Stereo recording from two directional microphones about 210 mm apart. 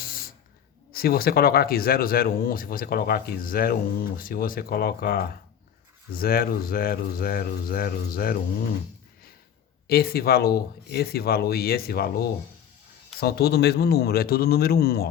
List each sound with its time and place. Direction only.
0.0 s a sound: 45° left (ahead or behind)
0.9 s speech: 45° left (ahead or behind)
9.8 s speech: 45° left (ahead or behind)